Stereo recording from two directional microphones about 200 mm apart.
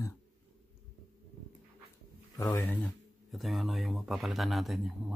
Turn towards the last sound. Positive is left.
turn(degrees=0)  # may be behind; listen again after turning